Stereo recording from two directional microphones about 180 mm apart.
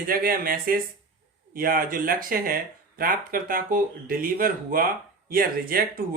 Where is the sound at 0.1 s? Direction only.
55° right (ahead or behind).